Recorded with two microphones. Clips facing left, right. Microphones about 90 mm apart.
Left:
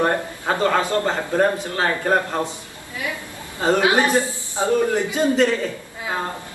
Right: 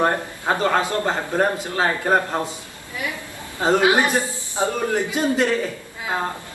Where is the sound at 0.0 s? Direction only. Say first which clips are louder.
Even; 20° right (ahead or behind).